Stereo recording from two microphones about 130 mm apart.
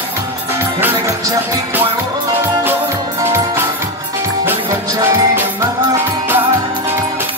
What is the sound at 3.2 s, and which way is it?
Music, 20° right (ahead or behind).